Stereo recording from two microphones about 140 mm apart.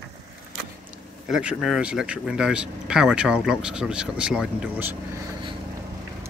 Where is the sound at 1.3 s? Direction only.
5° right (ahead or behind).